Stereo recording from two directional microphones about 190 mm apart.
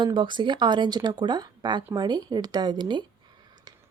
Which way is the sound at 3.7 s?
20° right (ahead or behind).